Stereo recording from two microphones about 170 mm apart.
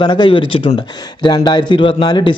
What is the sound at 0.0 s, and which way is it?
Speech, 25° left (ahead or behind).